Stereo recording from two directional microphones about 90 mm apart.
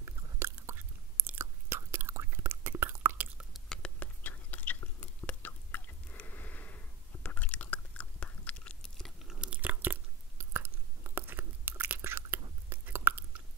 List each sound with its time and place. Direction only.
0.0 s chewing: 30° right (ahead or behind)
3.5 s chewing: 10° left (ahead or behind)
9.3 s chewing: 15° right (ahead or behind)